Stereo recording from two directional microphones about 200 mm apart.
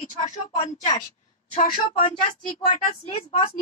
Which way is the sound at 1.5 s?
40° left (ahead or behind).